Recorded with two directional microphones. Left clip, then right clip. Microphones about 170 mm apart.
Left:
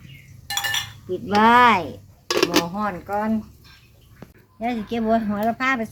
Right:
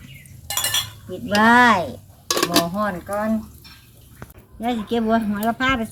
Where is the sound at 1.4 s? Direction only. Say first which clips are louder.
Even; 55° left (ahead or behind).